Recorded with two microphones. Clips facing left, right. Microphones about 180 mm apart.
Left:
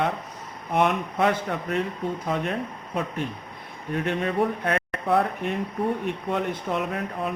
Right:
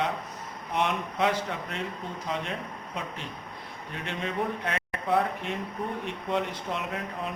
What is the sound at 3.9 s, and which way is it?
Speech, 60° left (ahead or behind).